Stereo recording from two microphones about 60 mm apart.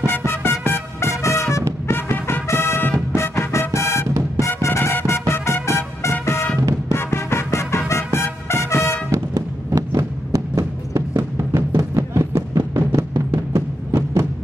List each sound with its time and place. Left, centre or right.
0.2 s music: left
1.9 s music: left
9.1 s a sound: right
12.2 s music: right